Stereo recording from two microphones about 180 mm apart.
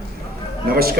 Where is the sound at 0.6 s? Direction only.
55° right (ahead or behind).